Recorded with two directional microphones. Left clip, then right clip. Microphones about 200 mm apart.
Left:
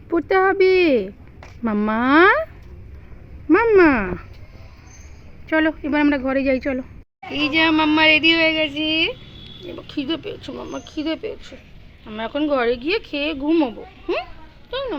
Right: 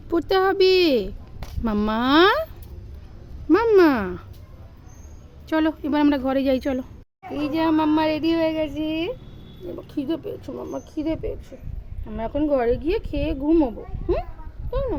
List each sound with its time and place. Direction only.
0.1 s speech: 5° right (ahead or behind)
3.5 s speech: 10° right (ahead or behind)
5.5 s speech: 10° right (ahead or behind)
7.3 s speech: 5° right (ahead or behind)